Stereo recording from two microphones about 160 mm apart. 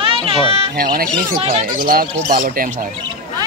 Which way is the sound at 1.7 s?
60° right (ahead or behind).